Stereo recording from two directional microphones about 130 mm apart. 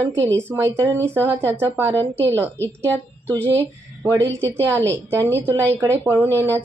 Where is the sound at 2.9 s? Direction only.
15° left (ahead or behind).